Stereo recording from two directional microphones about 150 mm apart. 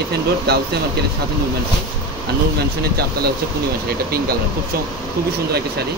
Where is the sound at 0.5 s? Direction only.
90° right.